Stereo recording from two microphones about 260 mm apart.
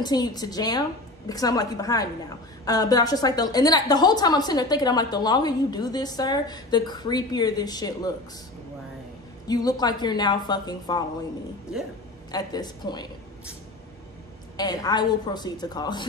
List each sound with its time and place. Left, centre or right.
0.0 s a woman's voice: centre
9.5 s a woman's voice: centre
12.3 s a woman's voice: centre
14.6 s a woman's voice: centre